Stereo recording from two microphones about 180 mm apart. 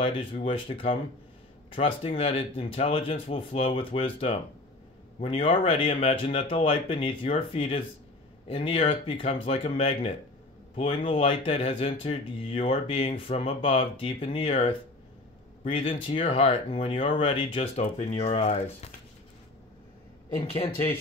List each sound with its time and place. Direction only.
0.0 s speech: 30° left (ahead or behind)
20.3 s speech: 35° left (ahead or behind)